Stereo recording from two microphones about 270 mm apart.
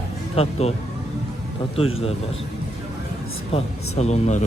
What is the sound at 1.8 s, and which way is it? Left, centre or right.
Speech, centre.